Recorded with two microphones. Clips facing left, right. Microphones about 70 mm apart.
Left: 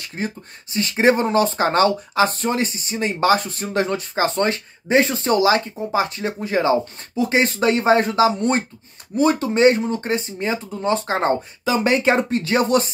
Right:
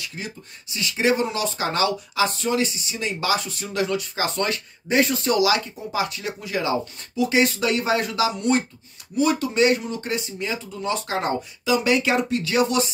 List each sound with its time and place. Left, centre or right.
0.0 s speech: left